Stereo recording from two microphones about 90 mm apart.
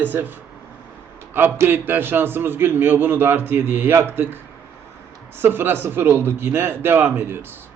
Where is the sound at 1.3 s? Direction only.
25° right (ahead or behind).